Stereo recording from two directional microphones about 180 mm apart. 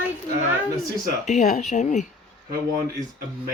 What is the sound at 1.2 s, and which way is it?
Speech, 40° left (ahead or behind).